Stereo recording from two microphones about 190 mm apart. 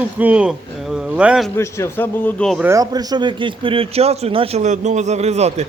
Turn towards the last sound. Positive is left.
turn(degrees=-35)  # may be behind; listen again after turning